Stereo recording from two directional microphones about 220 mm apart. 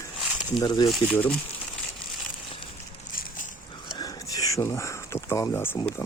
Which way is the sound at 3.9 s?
15° left (ahead or behind).